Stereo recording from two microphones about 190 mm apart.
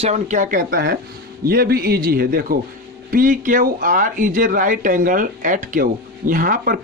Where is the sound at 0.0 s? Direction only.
40° right (ahead or behind).